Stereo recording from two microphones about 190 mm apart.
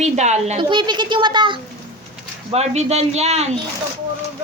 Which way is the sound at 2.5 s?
35° right (ahead or behind).